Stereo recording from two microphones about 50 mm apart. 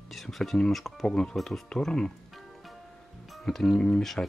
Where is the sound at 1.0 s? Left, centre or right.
Centre.